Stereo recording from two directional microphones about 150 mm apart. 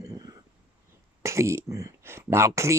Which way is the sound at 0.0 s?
25° right (ahead or behind).